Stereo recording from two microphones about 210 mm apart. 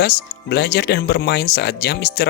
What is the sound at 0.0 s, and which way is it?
Speech, 50° left (ahead or behind).